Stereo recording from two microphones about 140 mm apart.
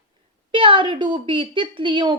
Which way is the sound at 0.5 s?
35° right (ahead or behind).